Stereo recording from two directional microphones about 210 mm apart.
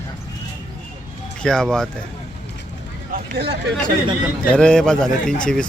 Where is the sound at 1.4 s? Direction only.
5° left (ahead or behind).